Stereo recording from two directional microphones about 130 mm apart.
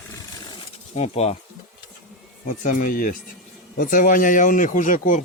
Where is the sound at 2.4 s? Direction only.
90° left.